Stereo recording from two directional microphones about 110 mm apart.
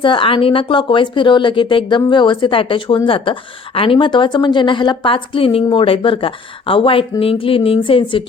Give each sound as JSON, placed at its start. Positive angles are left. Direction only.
{"t": 0.0, "sound": "speech", "side_deg": 50}